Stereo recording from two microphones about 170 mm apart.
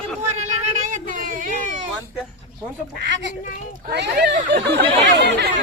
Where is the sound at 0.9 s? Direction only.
50° right (ahead or behind).